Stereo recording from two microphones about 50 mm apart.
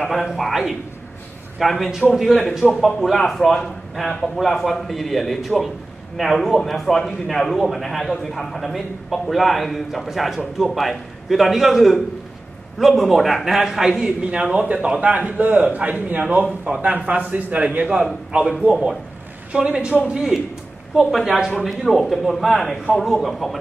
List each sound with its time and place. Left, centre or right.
0.1 s a man's voice: centre; by 18.5 s right
18.7 s a woman's voice: centre